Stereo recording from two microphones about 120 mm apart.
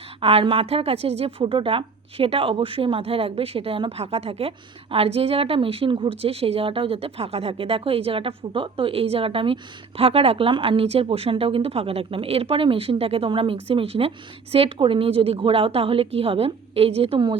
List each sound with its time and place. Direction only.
0.2 s a woman's voice: 55° right (ahead or behind)